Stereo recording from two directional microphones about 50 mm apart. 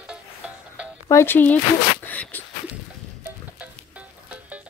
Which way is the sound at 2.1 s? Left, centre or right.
Left.